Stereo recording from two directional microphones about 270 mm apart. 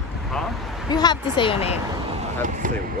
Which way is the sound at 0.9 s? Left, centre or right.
Centre.